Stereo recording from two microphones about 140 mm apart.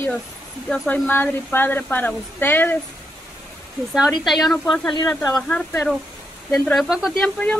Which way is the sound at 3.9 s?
Centre (ahead or behind).